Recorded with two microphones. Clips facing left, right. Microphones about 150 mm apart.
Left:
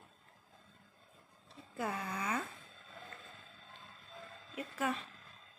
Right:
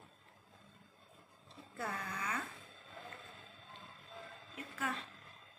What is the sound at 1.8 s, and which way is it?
Speech, 20° left (ahead or behind).